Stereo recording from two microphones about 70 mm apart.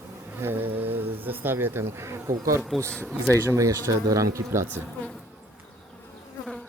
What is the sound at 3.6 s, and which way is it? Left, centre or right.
Speech, right.